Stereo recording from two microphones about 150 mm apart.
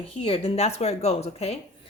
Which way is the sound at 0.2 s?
40° left (ahead or behind).